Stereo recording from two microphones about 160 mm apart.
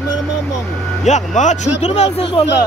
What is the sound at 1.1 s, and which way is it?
Speech, 45° left (ahead or behind).